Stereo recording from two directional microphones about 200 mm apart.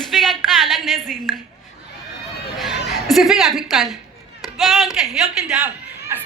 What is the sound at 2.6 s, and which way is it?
Music, centre (ahead or behind).